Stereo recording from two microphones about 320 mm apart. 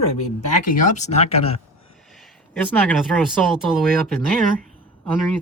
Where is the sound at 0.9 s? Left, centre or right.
Left.